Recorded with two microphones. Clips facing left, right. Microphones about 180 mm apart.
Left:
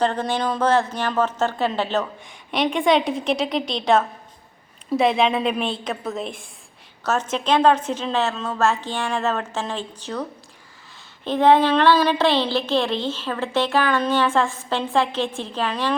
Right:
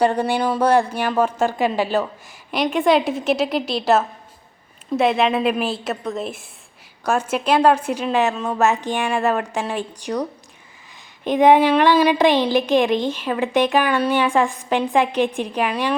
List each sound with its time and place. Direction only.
0.0 s a woman's voice: 10° right (ahead or behind)